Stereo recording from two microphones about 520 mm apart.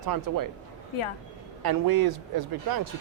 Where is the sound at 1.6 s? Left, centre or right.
Right.